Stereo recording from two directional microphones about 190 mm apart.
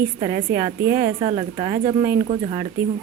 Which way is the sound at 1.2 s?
30° right (ahead or behind).